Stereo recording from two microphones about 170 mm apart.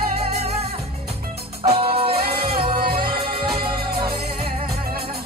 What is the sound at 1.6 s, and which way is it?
Music, 30° right (ahead or behind).